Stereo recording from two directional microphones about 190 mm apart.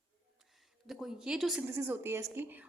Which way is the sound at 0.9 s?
Centre (ahead or behind).